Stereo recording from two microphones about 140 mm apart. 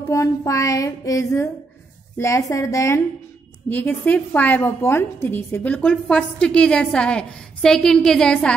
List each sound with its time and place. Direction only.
0.1 s music: 25° left (ahead or behind)
3.6 s a woman's voice: 15° left (ahead or behind)